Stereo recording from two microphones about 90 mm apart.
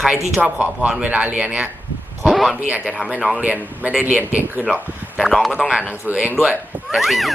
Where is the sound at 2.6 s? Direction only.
15° right (ahead or behind).